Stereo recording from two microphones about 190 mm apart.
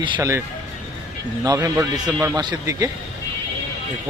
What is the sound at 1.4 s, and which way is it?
A man's voice, 20° right (ahead or behind).